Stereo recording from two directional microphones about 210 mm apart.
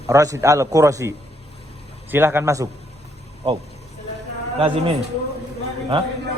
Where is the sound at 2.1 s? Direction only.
10° right (ahead or behind).